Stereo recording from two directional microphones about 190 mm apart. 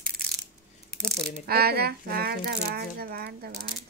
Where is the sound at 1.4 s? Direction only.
55° right (ahead or behind).